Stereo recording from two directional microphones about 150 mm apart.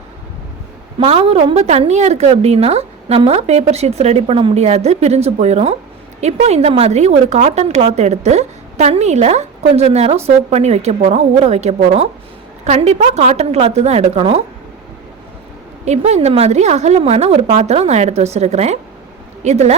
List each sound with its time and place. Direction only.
0.9 s a woman's voice: 40° right (ahead or behind)
15.8 s a woman's voice: 50° right (ahead or behind)